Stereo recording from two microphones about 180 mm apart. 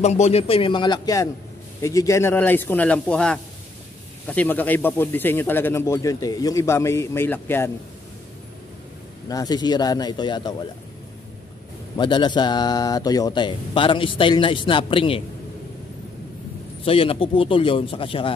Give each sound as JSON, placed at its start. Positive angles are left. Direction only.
{"t": 0.0, "sound": "speech", "side_deg": 35}
{"t": 9.3, "sound": "speech", "side_deg": 20}
{"t": 12.0, "sound": "speech", "side_deg": 25}
{"t": 16.8, "sound": "speech", "side_deg": 30}